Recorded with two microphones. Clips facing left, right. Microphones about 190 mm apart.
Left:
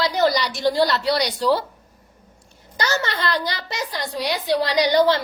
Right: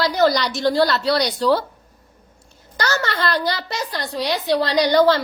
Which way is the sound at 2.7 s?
20° left (ahead or behind).